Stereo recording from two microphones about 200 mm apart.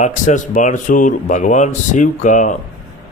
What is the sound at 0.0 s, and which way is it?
Speech, 40° left (ahead or behind).